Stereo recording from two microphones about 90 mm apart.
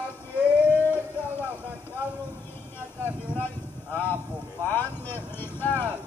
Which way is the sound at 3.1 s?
25° left (ahead or behind).